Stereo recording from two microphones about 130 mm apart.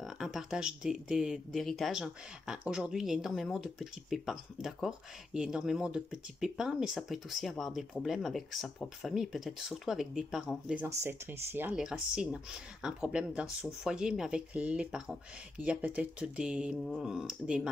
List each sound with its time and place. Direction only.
0.0 s speech: 5° right (ahead or behind)
10.9 s speech: 20° right (ahead or behind)
11.7 s speech: 5° right (ahead or behind)